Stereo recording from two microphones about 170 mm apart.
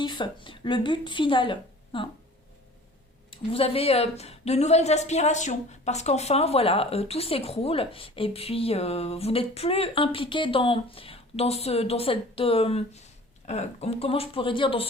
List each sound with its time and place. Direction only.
0.0 s speech: 25° left (ahead or behind)
3.2 s a woman's voice: 35° left (ahead or behind)